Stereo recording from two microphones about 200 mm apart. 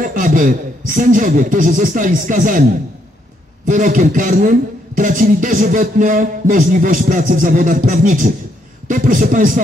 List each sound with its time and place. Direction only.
0.0 s a man's voice: 45° right (ahead or behind)
3.6 s a man's voice: 45° right (ahead or behind)